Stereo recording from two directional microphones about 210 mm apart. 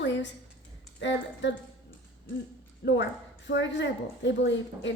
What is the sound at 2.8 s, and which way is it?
Speech, 55° left (ahead or behind).